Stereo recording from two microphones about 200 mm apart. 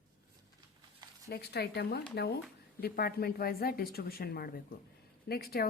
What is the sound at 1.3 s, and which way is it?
A woman's voice, 55° left (ahead or behind).